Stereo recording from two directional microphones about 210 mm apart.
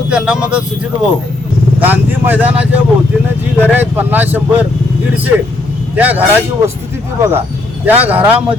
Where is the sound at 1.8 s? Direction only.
10° right (ahead or behind).